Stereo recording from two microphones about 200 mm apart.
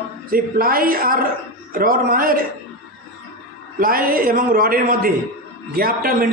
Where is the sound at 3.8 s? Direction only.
45° right (ahead or behind).